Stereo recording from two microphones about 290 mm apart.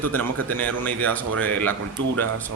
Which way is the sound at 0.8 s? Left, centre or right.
Centre.